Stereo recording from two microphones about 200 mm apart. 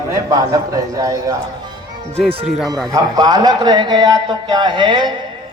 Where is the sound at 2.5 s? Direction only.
Centre (ahead or behind).